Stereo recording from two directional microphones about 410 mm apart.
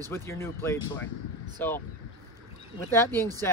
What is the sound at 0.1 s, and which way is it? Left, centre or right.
Speech, centre.